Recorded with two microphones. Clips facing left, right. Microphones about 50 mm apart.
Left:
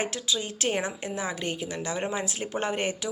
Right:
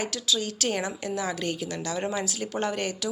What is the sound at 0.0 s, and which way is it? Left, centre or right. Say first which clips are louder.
A woman's voice: right 1 dB; left.